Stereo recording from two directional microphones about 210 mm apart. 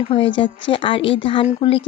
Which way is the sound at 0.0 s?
25° left (ahead or behind).